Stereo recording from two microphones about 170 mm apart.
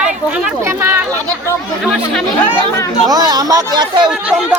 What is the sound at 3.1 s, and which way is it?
Speech, 25° right (ahead or behind).